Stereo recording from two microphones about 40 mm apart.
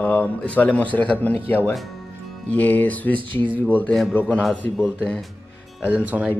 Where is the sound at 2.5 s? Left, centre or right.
Left.